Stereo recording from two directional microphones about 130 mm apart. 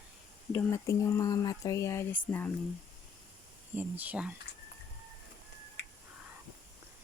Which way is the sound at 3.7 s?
15° right (ahead or behind).